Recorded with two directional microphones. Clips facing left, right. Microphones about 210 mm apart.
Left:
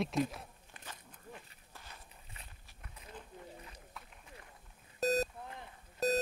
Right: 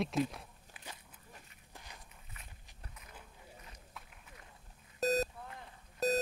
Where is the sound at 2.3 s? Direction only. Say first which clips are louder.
Left 1 dB; 30° left (ahead or behind).